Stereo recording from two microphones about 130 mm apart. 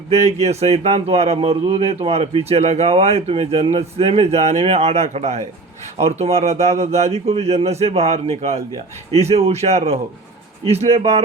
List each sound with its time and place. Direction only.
0.1 s a man's voice: 55° right (ahead or behind)